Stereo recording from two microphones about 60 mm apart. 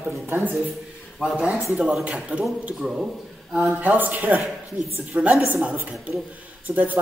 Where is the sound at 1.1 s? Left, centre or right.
Centre.